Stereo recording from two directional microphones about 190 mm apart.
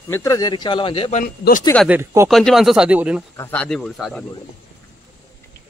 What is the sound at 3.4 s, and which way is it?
Speech, 5° left (ahead or behind).